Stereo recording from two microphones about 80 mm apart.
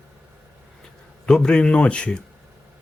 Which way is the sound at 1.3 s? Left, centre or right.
Centre.